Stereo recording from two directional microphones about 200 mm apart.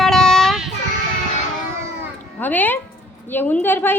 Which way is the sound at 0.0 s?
5° left (ahead or behind).